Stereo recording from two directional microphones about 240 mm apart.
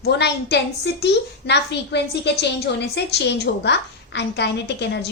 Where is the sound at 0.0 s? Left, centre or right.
Left.